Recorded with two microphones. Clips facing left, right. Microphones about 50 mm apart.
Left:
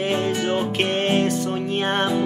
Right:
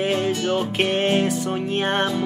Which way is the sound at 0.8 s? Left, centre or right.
Centre.